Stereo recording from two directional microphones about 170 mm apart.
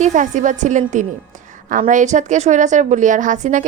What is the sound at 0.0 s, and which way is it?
A woman's voice, 45° right (ahead or behind).